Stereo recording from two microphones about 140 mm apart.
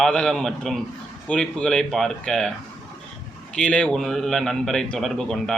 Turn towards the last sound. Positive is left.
turn(degrees=5)  # may be behind; listen again after turning